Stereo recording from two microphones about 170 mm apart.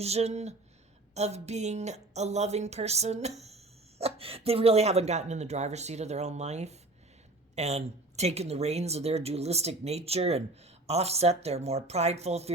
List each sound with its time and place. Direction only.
0.0 s a woman's voice: 40° right (ahead or behind)